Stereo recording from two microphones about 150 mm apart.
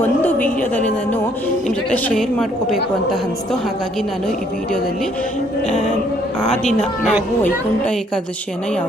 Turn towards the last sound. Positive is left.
turn(degrees=10)  # may be behind; listen again after turning